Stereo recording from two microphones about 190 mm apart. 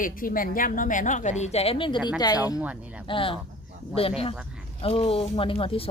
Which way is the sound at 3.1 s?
25° left (ahead or behind).